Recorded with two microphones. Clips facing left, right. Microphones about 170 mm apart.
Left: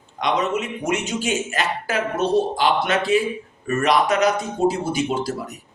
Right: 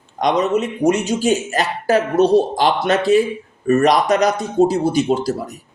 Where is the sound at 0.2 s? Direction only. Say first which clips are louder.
Right 5 dB; 40° right (ahead or behind).